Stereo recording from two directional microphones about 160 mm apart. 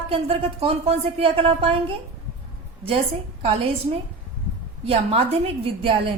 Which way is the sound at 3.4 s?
35° right (ahead or behind).